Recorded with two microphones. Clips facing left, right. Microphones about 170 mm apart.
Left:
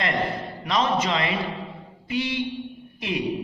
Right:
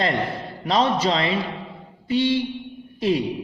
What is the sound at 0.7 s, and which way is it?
A man's voice, 30° right (ahead or behind).